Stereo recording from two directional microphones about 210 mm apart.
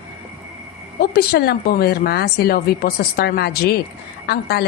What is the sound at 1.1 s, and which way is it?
A woman's voice, 50° left (ahead or behind).